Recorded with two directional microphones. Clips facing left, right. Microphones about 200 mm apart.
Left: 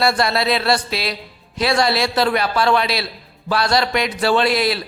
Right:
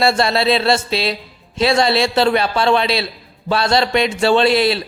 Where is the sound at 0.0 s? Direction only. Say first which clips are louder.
Right 3 dB; 25° right (ahead or behind).